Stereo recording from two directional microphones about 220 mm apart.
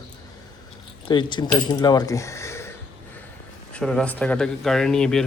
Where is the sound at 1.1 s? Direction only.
20° left (ahead or behind).